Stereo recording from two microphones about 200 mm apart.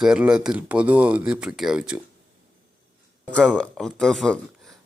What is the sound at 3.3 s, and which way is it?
Speech, 5° left (ahead or behind).